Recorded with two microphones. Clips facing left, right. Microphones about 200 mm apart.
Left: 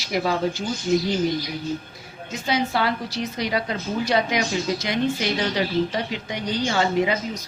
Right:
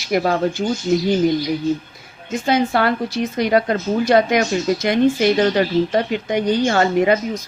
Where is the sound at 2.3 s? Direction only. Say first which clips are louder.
Right 6 dB; 50° right (ahead or behind).